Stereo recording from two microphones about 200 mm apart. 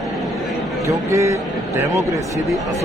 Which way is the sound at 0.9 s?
15° right (ahead or behind).